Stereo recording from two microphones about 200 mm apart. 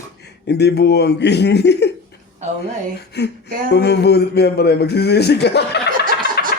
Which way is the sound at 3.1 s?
55° left (ahead or behind).